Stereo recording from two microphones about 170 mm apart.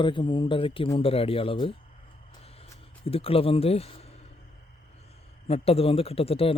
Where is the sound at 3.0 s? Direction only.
35° left (ahead or behind).